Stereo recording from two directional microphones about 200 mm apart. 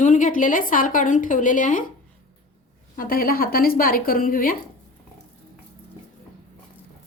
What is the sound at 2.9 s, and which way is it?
A woman's voice, 45° left (ahead or behind).